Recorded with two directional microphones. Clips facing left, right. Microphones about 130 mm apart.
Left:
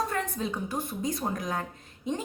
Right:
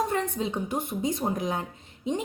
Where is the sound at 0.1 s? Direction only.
25° right (ahead or behind).